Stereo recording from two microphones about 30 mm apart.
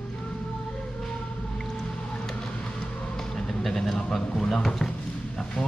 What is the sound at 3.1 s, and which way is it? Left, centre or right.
Insect, centre.